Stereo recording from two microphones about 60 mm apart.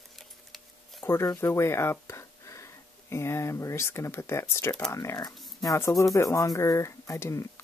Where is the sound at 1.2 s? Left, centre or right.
Left.